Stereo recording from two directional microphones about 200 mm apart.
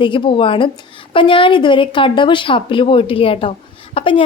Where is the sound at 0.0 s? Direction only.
25° left (ahead or behind).